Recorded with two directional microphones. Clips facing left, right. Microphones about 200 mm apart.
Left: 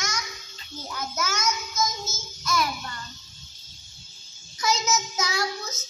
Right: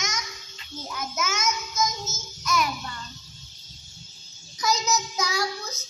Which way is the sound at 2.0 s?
20° right (ahead or behind).